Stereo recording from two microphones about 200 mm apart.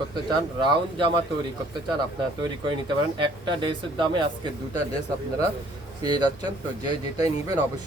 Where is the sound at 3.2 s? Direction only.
25° right (ahead or behind).